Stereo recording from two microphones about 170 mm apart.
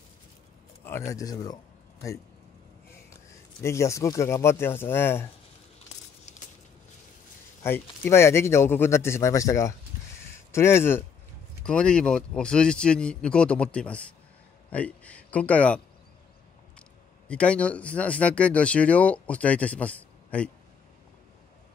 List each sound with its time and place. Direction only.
1.1 s speech: 20° left (ahead or behind)
3.6 s speech: 15° left (ahead or behind)
7.6 s speech: 15° left (ahead or behind)
17.3 s speech: 5° left (ahead or behind)